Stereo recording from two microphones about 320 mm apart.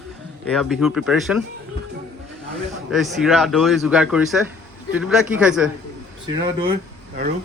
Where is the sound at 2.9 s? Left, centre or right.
Centre.